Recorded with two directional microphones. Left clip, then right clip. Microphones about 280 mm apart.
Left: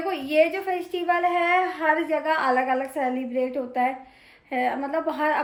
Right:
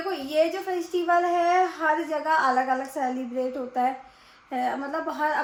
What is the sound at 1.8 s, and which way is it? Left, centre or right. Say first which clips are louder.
A woman's voice: left 2 dB; centre.